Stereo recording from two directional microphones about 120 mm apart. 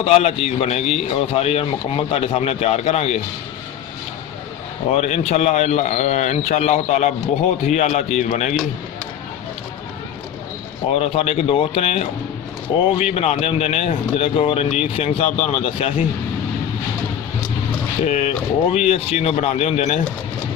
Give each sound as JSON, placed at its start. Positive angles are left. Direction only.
{"t": 0.0, "sound": "a man's voice", "side_deg": 60}
{"t": 4.9, "sound": "a man's voice", "side_deg": 65}
{"t": 10.9, "sound": "a man's voice", "side_deg": 55}
{"t": 18.0, "sound": "a man's voice", "side_deg": 75}